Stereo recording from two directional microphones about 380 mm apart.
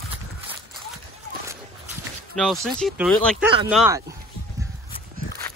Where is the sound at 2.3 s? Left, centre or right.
Centre.